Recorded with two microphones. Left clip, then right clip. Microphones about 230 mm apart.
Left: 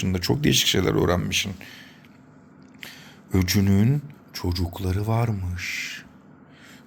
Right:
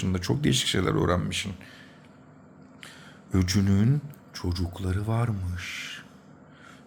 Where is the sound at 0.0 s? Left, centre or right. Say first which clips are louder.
Left 4 dB; centre.